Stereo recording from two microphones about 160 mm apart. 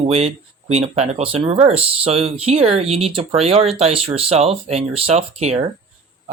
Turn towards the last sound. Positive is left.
turn(degrees=-40)  # may be behind; listen again after turning